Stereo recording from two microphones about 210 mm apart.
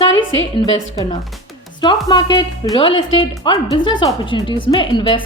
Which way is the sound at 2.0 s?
20° left (ahead or behind).